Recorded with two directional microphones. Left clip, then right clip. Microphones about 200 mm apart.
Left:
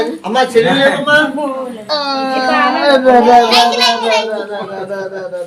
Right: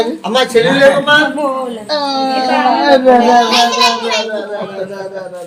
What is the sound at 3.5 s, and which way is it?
Speech, 25° left (ahead or behind).